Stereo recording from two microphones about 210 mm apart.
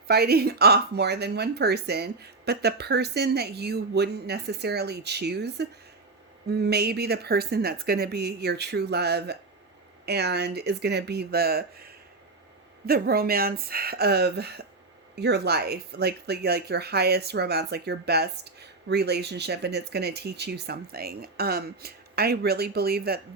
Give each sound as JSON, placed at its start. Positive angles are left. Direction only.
{"t": 0.1, "sound": "speech", "side_deg": -50}